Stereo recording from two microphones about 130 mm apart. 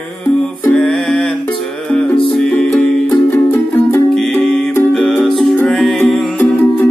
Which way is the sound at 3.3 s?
20° left (ahead or behind).